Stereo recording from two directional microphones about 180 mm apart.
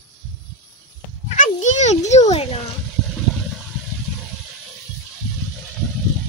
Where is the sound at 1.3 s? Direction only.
40° left (ahead or behind).